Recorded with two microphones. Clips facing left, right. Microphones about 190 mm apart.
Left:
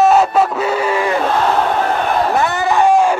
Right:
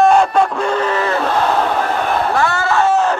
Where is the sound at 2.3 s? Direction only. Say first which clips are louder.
Left 1 dB; 20° left (ahead or behind).